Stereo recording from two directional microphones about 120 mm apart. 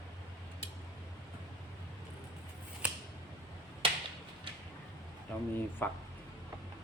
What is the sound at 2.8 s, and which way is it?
Scissors, 10° right (ahead or behind).